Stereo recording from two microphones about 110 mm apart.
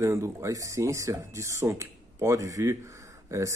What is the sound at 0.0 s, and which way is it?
Speech, 25° right (ahead or behind).